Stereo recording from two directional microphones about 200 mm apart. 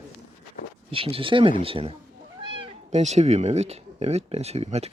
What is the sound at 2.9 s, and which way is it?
Speech, 35° right (ahead or behind).